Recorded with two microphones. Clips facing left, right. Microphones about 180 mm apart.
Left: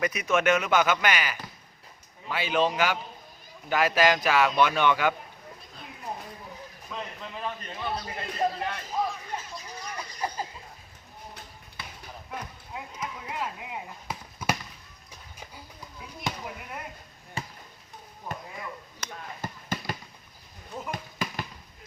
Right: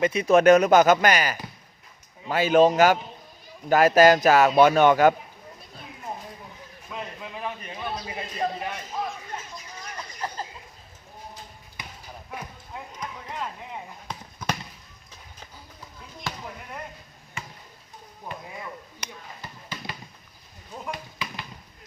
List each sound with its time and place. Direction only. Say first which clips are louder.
0.0 s speech: right 7 dB; 30° right (ahead or behind)
6.9 s a man's voice: right 2 dB; 10° right (ahead or behind)
11.8 s basketball bounce: right 1 dB; 15° right (ahead or behind)
12.7 s clip-clop: even; 5° left (ahead or behind)
16.3 s basketball bounce: left 2 dB; 20° left (ahead or behind)
17.4 s basketball bounce: left 3 dB; 35° left (ahead or behind)
18.3 s a sound: even; 15° right (ahead or behind)
19.4 s a sound: left 6 dB; 45° left (ahead or behind)